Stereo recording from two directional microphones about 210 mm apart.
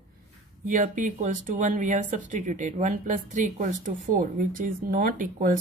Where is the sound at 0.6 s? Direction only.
35° right (ahead or behind).